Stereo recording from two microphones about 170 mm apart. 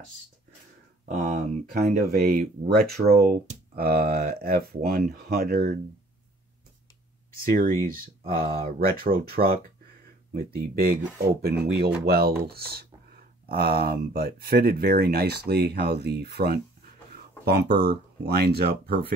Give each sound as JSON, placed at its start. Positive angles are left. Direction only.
{"t": 1.0, "sound": "speech", "side_deg": -55}
{"t": 8.3, "sound": "speech", "side_deg": -60}